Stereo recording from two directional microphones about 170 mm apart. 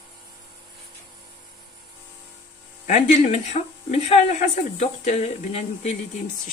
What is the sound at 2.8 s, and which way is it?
Speech, 45° left (ahead or behind).